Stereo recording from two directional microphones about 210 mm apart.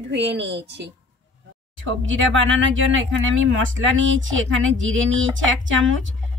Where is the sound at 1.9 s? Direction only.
65° right (ahead or behind).